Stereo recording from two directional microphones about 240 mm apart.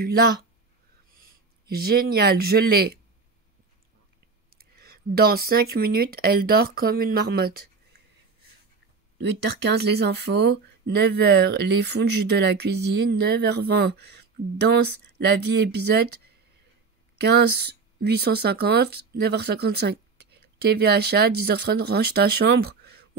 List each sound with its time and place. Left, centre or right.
1.1 s speech: right
4.5 s speech: right
9.2 s speech: right
17.2 s speech: right